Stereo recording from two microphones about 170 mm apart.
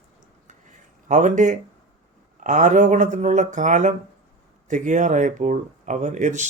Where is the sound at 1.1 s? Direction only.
45° right (ahead or behind).